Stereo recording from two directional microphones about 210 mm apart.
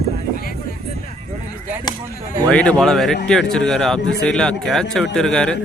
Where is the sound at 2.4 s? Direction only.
5° left (ahead or behind).